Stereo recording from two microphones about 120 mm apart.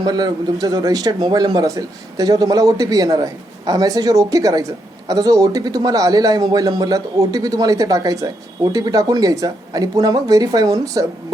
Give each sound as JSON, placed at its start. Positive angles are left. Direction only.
{"t": 0.0, "sound": "a man's voice", "side_deg": -35}